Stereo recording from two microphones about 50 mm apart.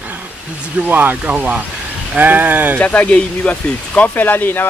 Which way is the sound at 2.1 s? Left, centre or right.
Right.